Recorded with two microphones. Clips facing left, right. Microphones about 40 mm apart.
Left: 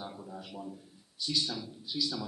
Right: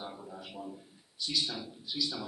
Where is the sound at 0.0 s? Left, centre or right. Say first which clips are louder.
Even; centre.